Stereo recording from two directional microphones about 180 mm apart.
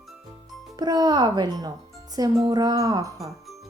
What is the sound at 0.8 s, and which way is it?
Speech, 20° right (ahead or behind).